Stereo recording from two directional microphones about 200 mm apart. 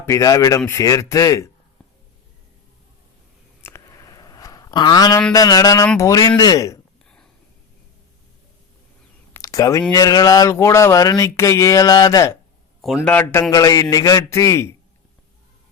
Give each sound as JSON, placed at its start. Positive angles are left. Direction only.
{"t": 0.0, "sound": "speech", "side_deg": 15}
{"t": 3.6, "sound": "a sound", "side_deg": 15}
{"t": 5.3, "sound": "speech", "side_deg": 20}
{"t": 9.3, "sound": "a sound", "side_deg": 15}
{"t": 9.9, "sound": "speech", "side_deg": 20}
{"t": 12.8, "sound": "speech", "side_deg": 0}